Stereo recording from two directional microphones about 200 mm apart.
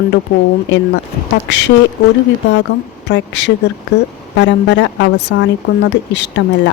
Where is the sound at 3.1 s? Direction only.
65° left (ahead or behind).